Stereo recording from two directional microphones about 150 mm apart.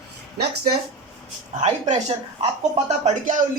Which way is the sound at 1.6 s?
50° right (ahead or behind).